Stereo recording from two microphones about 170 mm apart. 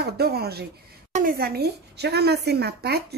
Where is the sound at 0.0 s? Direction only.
70° right (ahead or behind).